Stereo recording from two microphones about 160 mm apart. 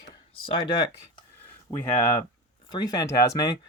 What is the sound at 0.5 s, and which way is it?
Speech, 30° left (ahead or behind).